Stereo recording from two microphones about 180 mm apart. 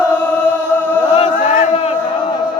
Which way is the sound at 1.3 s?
45° left (ahead or behind).